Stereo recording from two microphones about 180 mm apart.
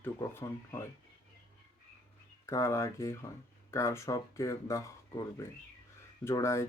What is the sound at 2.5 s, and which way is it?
Speech, 15° left (ahead or behind).